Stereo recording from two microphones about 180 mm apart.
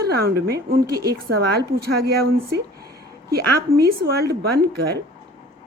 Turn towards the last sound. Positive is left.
turn(degrees=-65)  # may be behind; listen again after turning